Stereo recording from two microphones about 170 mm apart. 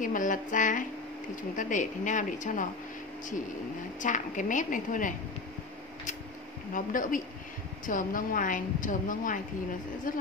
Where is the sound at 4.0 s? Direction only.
50° left (ahead or behind).